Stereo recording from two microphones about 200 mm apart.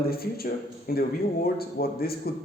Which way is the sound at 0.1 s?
50° left (ahead or behind).